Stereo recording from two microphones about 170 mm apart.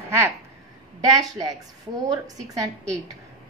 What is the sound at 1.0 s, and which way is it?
A woman's voice, 20° right (ahead or behind).